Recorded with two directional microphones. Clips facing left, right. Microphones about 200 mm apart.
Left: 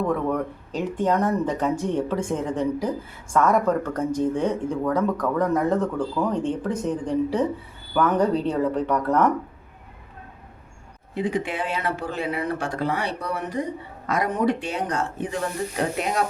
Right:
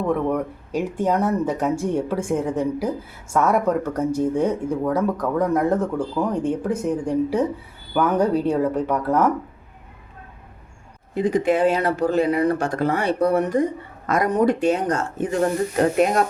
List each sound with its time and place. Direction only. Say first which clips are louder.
0.1 s speech: right 2 dB; 10° right (ahead or behind)
11.1 s speech: right 7 dB; 40° right (ahead or behind)